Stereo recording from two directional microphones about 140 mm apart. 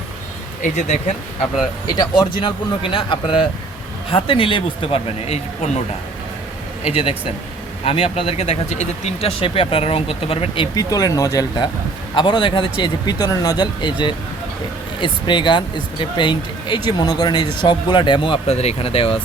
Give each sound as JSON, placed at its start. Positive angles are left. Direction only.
{"t": 0.6, "sound": "speech", "side_deg": 60}
{"t": 1.9, "sound": "speech", "side_deg": 30}
{"t": 6.9, "sound": "speech", "side_deg": 45}
{"t": 10.8, "sound": "speech", "side_deg": 25}